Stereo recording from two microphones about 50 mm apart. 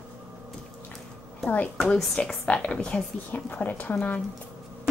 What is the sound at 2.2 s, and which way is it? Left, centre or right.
A woman's voice, left.